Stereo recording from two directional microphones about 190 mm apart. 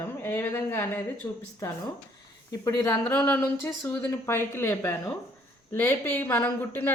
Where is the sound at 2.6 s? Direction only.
20° left (ahead or behind).